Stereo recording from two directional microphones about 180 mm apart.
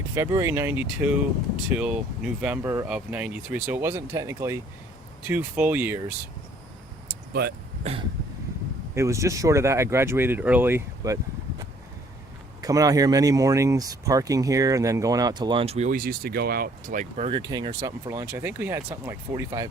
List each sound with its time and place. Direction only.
0.1 s speech: 15° right (ahead or behind)
9.0 s speech: 15° right (ahead or behind)
12.6 s speech: 20° right (ahead or behind)
15.9 s speech: 55° right (ahead or behind); by 17.4 s 35° right (ahead or behind)
17.4 s speech: 20° right (ahead or behind)